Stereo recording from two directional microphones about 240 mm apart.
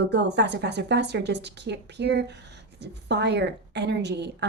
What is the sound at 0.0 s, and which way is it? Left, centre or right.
A woman's voice, right.